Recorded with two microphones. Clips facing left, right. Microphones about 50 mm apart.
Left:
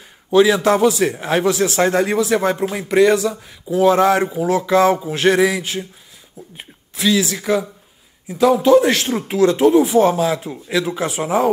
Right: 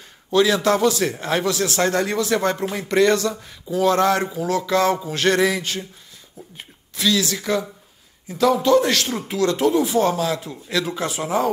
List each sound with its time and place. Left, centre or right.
0.3 s a man's voice: centre